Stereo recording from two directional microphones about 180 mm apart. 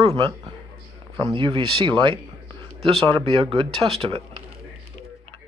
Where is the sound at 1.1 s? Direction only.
25° right (ahead or behind).